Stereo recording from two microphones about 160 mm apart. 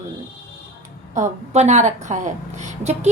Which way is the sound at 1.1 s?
45° right (ahead or behind).